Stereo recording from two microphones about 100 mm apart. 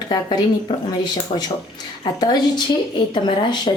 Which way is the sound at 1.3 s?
65° left (ahead or behind).